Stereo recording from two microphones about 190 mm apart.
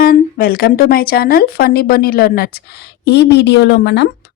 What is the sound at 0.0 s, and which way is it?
Speech, 50° left (ahead or behind).